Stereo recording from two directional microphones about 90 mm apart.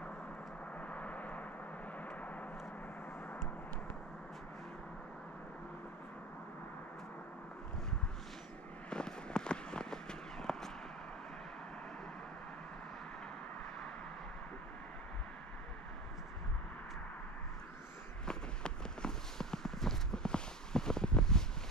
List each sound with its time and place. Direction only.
0.7 s gong: 15° left (ahead or behind)
2.0 s vehicle: 15° left (ahead or behind)
8.9 s a sound: 10° left (ahead or behind)
18.2 s walk: 10° left (ahead or behind)